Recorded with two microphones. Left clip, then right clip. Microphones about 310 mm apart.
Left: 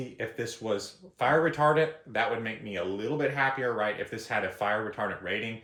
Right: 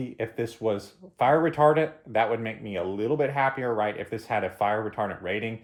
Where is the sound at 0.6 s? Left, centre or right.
Right.